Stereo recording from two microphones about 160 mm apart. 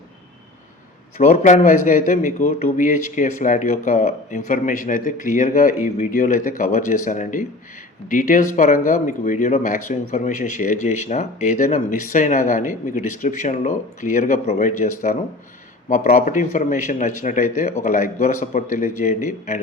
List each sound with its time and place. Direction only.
1.2 s speech: 50° left (ahead or behind)